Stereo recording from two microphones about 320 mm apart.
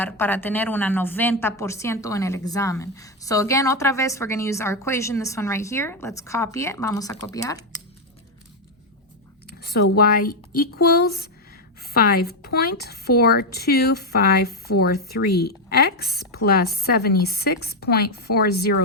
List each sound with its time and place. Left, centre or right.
0.0 s a woman's voice: centre
9.6 s a woman's voice: left